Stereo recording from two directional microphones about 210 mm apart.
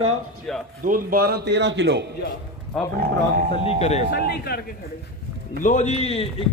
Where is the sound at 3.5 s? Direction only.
30° left (ahead or behind).